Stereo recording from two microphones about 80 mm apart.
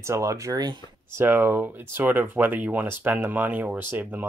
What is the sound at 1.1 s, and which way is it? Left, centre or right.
Speech, right.